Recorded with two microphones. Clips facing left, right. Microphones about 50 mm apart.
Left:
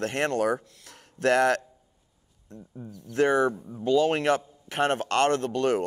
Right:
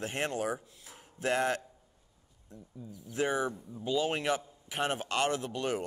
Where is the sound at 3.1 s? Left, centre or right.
Left.